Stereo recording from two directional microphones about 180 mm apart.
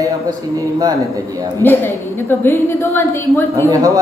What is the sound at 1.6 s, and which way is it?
A woman's voice, 10° left (ahead or behind).